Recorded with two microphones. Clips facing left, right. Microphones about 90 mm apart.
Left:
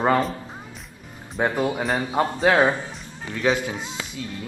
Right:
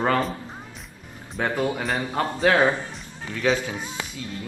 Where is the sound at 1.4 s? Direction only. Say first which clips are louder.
Left 2 dB; 20° left (ahead or behind).